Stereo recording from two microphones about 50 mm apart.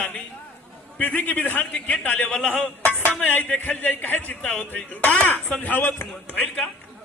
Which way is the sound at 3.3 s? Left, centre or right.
Left.